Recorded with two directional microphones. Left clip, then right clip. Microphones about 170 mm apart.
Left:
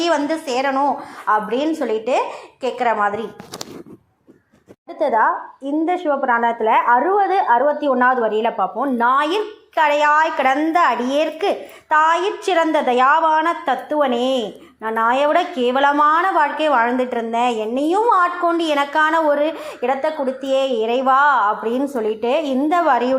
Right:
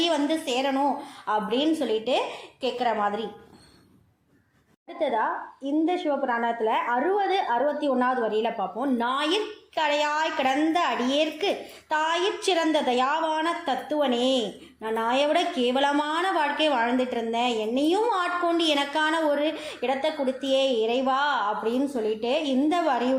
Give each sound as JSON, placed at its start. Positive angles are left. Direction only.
{"t": 0.0, "sound": "a woman's voice", "side_deg": 10}
{"t": 4.9, "sound": "a woman's voice", "side_deg": 25}
{"t": 12.5, "sound": "a woman's voice", "side_deg": 0}
{"t": 12.9, "sound": "a woman's voice", "side_deg": 15}